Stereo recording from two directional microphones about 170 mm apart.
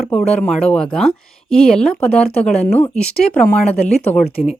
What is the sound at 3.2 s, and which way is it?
Speech, 45° left (ahead or behind).